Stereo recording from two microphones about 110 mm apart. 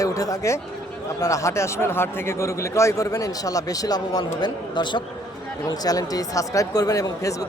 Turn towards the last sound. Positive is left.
turn(degrees=30)  # may be behind; listen again after turning